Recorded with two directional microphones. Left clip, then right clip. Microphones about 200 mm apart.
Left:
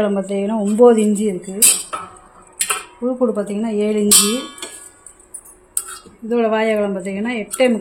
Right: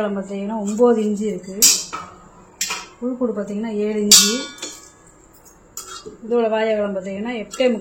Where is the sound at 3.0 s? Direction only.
65° left (ahead or behind).